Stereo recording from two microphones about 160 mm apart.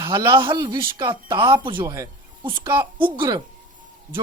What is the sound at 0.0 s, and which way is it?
Speech, 20° right (ahead or behind).